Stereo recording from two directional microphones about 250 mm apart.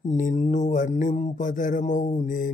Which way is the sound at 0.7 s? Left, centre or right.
Left.